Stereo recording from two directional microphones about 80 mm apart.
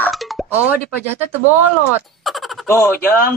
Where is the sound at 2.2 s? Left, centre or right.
Centre.